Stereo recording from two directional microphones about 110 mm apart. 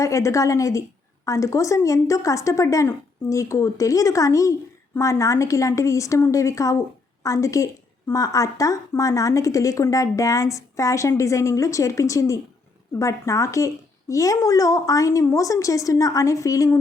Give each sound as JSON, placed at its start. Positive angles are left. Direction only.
{"t": 0.0, "sound": "a woman's voice", "side_deg": 25}